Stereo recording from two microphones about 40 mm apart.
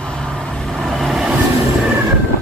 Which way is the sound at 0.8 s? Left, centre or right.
Centre.